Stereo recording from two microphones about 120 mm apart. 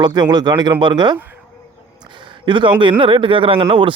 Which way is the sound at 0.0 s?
40° right (ahead or behind).